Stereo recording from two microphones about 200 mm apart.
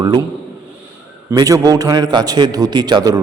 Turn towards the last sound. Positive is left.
turn(degrees=-20)  # may be behind; listen again after turning